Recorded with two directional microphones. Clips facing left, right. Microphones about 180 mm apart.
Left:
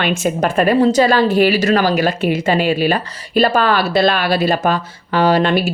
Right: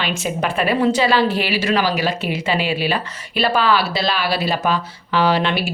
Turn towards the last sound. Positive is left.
turn(degrees=45)  # may be behind; listen again after turning